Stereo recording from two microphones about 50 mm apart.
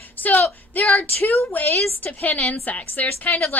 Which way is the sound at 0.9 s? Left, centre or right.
Left.